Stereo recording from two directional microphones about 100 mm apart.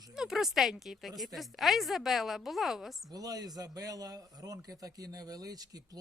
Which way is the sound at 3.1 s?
40° right (ahead or behind).